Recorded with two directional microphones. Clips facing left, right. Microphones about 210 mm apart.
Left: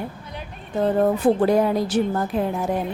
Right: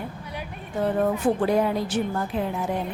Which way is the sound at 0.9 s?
35° left (ahead or behind).